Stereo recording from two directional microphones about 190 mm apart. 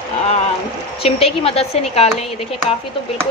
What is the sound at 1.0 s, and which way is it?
A woman's voice, 30° left (ahead or behind).